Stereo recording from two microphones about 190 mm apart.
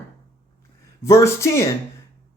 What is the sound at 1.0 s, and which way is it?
Speech, 15° left (ahead or behind).